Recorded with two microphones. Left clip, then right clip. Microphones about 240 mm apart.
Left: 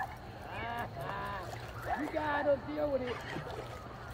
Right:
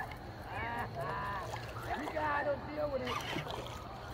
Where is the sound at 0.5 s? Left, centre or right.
Left.